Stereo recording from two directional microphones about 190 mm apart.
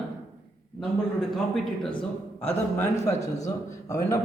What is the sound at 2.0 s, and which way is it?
Speech, 10° left (ahead or behind).